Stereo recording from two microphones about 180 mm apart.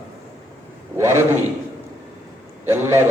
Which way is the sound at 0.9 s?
15° right (ahead or behind).